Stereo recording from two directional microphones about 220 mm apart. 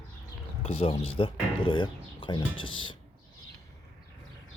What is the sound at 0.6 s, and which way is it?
Speech, 25° left (ahead or behind).